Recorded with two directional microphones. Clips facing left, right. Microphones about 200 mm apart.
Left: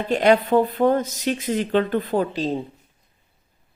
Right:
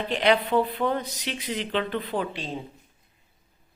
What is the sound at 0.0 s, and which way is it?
Speech, 45° left (ahead or behind).